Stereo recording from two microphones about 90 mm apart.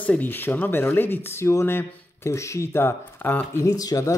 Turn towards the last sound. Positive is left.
turn(degrees=40)  # may be behind; listen again after turning